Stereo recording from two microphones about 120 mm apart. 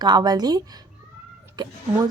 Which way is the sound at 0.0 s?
35° right (ahead or behind).